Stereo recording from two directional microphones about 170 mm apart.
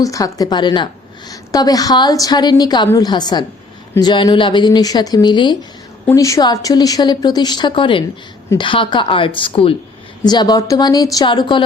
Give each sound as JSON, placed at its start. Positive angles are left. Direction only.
{"t": 0.0, "sound": "a woman's voice", "side_deg": 20}